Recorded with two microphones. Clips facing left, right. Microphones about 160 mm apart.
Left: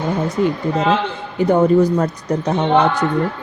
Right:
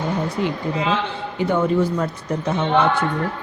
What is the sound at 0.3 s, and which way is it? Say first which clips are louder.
A woman's voice: left 5 dB; 45° left (ahead or behind).